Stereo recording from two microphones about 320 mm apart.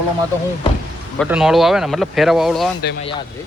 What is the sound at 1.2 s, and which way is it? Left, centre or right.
A man's voice, centre.